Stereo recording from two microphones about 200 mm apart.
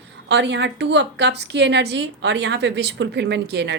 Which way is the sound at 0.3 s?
60° right (ahead or behind).